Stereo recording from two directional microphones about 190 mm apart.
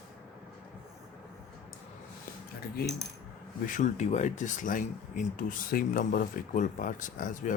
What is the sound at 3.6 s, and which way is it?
Speech, 40° left (ahead or behind).